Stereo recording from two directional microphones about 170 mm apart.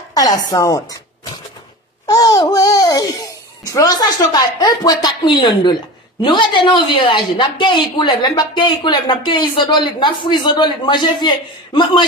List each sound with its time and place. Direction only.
0.1 s speech: 20° left (ahead or behind)
2.0 s babbling: 20° left (ahead or behind)
6.2 s a woman's voice: 25° left (ahead or behind)